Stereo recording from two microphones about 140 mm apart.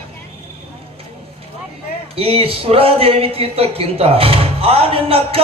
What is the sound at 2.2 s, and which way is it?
A man's voice, 45° right (ahead or behind).